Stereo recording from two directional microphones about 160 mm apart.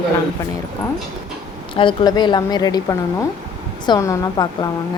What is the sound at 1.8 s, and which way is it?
A woman's voice, 30° left (ahead or behind).